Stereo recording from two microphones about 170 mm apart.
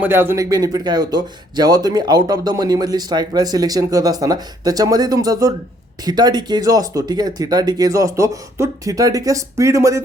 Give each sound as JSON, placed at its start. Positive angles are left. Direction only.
{"t": 0.0, "sound": "speech", "side_deg": -15}